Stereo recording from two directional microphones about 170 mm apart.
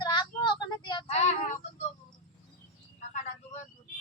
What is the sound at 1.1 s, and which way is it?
Child singing, 40° left (ahead or behind).